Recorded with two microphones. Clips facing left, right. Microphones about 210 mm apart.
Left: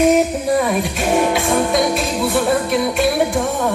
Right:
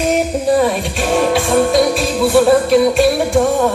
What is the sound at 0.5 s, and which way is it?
Music, 30° right (ahead or behind).